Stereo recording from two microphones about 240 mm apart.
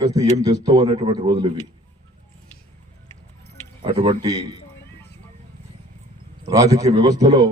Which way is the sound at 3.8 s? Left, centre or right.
Right.